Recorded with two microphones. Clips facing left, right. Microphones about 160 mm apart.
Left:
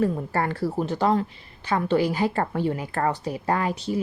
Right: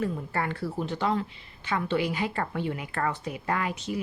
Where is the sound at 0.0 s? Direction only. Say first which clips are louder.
Left 6 dB; 40° left (ahead or behind).